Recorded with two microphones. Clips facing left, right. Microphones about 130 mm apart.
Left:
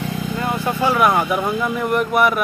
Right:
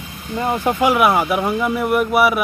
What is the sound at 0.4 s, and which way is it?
Speech, 15° right (ahead or behind).